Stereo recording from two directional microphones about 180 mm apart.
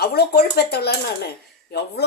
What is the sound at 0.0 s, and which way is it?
Speech, 60° left (ahead or behind).